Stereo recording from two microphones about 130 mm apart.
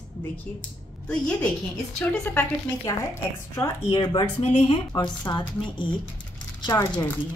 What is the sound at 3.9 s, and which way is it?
Speech, 35° left (ahead or behind).